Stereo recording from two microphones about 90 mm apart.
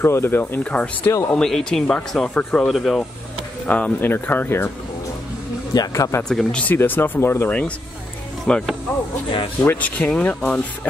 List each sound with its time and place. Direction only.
0.0 s speech: 30° left (ahead or behind)
0.7 s speech: 15° left (ahead or behind)
3.6 s speech: 15° left (ahead or behind)
5.7 s speech: 45° left (ahead or behind)
6.2 s speech: 5° left (ahead or behind)
6.6 s speech: 20° left (ahead or behind)
7.4 s speech: 15° left (ahead or behind)
9.6 s speech: 20° left (ahead or behind)